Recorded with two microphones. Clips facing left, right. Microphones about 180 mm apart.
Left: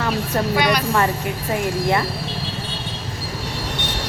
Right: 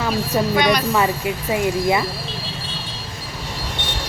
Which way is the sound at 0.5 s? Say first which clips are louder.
Right 1 dB; 10° left (ahead or behind).